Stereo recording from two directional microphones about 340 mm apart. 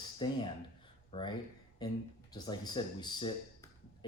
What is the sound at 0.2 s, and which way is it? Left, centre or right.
Speech, centre.